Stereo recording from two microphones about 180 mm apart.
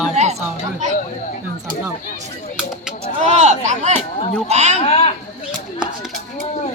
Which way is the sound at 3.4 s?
40° right (ahead or behind).